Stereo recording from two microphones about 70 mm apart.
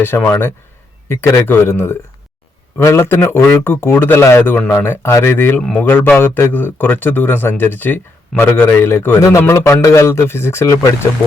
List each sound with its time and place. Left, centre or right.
0.2 s speech: left